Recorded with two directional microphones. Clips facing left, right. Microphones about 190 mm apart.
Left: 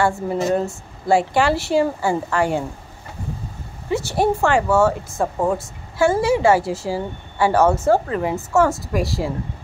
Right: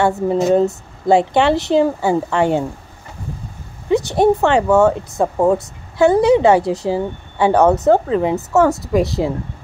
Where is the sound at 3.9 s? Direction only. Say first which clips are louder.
Right 5 dB; 20° right (ahead or behind).